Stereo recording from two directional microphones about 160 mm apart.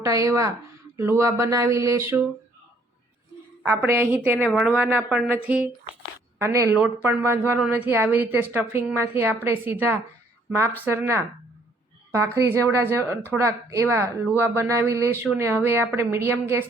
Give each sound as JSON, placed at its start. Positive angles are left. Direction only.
{"t": 0.0, "sound": "speech", "side_deg": -20}
{"t": 3.6, "sound": "a woman's voice", "side_deg": -10}